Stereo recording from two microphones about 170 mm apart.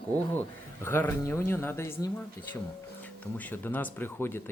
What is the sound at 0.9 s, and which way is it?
Speech, 15° left (ahead or behind).